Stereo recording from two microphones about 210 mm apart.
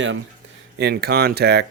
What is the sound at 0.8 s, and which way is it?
Speech, 50° right (ahead or behind).